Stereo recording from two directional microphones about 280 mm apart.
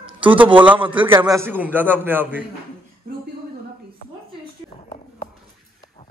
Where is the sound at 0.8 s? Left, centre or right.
Centre.